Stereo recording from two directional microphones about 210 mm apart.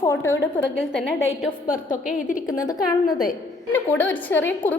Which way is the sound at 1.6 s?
40° left (ahead or behind).